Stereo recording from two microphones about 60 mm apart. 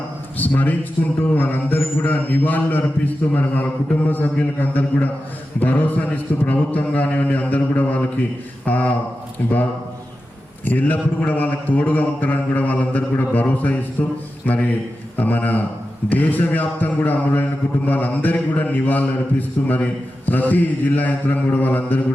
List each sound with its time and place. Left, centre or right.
0.3 s a man's voice: left
10.7 s a man's voice: left